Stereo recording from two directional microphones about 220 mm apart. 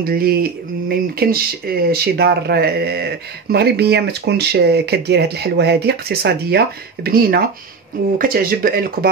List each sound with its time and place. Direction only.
0.0 s speech: 45° right (ahead or behind)